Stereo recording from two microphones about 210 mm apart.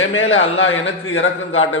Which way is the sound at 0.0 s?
70° left (ahead or behind).